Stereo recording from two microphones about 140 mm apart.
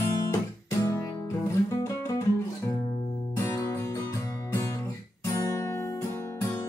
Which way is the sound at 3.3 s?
20° left (ahead or behind).